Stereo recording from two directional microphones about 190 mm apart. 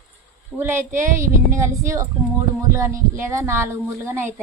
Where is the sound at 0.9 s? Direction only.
45° right (ahead or behind).